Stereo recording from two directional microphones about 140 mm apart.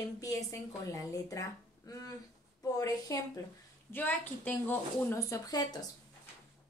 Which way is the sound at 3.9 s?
15° left (ahead or behind).